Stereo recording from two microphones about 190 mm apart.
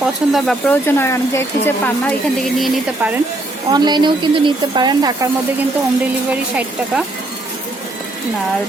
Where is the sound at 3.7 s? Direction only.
20° right (ahead or behind).